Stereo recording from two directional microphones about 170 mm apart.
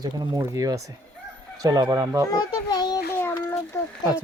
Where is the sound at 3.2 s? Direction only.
15° left (ahead or behind).